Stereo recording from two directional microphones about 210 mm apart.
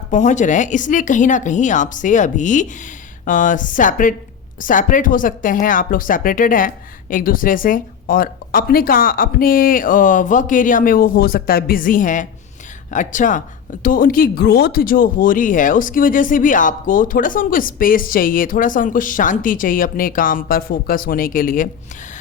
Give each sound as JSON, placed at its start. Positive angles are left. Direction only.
{"t": 0.1, "sound": "speech", "side_deg": 35}